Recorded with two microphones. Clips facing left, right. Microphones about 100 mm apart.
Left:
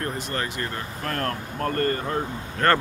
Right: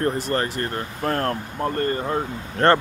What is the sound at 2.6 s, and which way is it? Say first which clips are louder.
Speech: right 4 dB; 35° right (ahead or behind).